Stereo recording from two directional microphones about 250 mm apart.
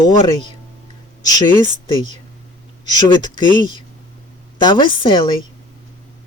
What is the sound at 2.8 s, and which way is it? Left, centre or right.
A woman's voice, centre.